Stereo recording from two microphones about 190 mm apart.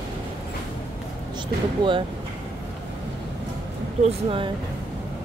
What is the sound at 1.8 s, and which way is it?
Speech, 25° right (ahead or behind).